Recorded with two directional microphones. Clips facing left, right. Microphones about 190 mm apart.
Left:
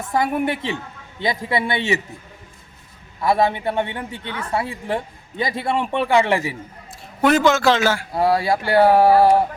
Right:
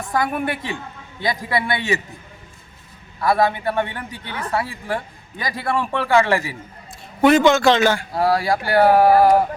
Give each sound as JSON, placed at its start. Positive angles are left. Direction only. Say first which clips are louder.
{"t": 0.1, "sound": "a man's voice", "louder": "left 2 dB", "side_deg": 20}
{"t": 3.2, "sound": "a man's voice", "louder": "even", "side_deg": 25}
{"t": 7.2, "sound": "a man's voice", "louder": "right 2 dB", "side_deg": 0}
{"t": 8.1, "sound": "a man's voice", "louder": "even", "side_deg": 25}